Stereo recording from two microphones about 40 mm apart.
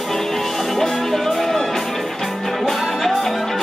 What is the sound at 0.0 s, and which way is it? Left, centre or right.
Music, centre.